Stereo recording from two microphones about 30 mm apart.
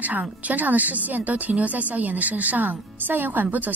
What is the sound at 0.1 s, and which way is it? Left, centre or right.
A woman's voice, right.